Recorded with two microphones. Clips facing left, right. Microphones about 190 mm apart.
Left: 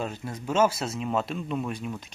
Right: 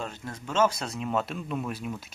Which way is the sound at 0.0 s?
10° left (ahead or behind).